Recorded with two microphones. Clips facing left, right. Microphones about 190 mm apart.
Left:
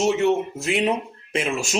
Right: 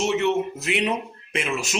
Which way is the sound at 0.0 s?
35° left (ahead or behind).